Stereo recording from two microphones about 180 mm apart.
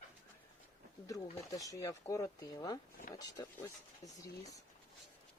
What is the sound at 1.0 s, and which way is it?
Speech, 20° left (ahead or behind).